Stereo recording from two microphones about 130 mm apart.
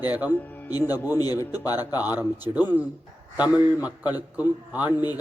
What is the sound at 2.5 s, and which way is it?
Speech, 30° right (ahead or behind).